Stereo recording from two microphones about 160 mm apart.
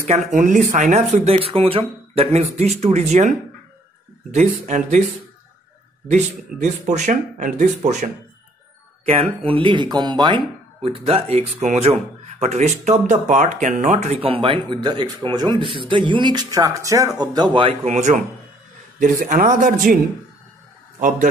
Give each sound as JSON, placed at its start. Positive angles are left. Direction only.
{"t": 0.1, "sound": "speech", "side_deg": -50}
{"t": 6.0, "sound": "speech", "side_deg": -45}